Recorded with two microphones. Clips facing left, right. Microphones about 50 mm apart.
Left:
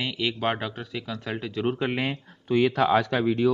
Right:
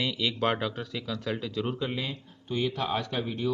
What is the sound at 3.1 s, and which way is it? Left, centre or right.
Speech, left.